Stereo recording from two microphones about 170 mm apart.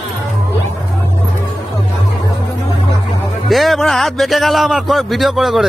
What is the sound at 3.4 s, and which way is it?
A man's voice, centre (ahead or behind).